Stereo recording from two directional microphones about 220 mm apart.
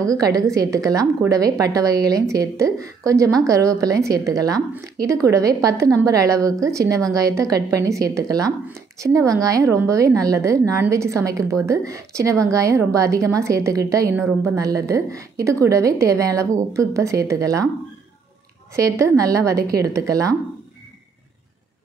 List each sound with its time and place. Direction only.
0.1 s a woman's voice: 15° right (ahead or behind)
18.8 s a woman's voice: 15° right (ahead or behind)